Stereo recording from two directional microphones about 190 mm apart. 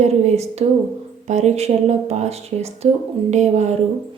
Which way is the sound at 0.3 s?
35° right (ahead or behind).